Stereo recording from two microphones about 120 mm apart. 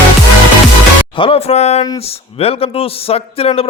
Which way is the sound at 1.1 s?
50° left (ahead or behind).